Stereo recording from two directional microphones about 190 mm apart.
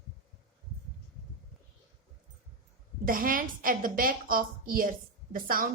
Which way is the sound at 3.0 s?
45° right (ahead or behind).